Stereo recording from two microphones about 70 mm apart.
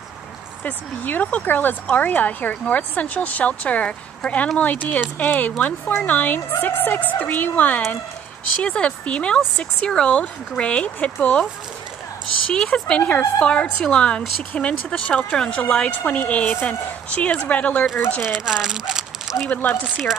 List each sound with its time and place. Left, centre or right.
0.7 s a woman's voice: left
12.6 s a woman's voice: centre
18.2 s speech: centre
19.5 s speech: left
19.8 s speech: centre